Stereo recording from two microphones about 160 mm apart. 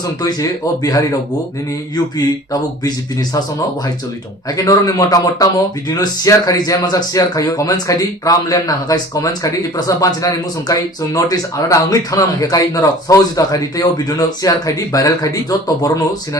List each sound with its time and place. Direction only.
0.2 s speech: 25° left (ahead or behind)
2.1 s speech: 25° left (ahead or behind)
4.5 s speech: 20° left (ahead or behind)